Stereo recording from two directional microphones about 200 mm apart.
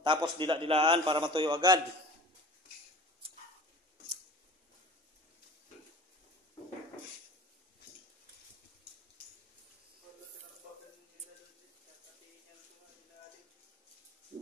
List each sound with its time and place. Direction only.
0.0 s a man's voice: 25° right (ahead or behind)